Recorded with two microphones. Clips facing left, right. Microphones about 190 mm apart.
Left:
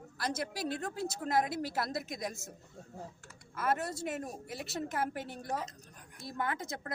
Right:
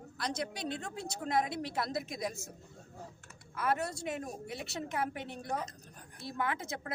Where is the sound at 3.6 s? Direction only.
Centre (ahead or behind).